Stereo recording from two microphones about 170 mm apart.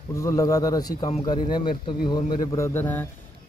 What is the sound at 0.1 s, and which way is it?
Speech, 20° left (ahead or behind).